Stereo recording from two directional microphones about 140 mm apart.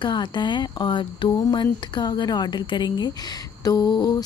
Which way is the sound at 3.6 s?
25° left (ahead or behind).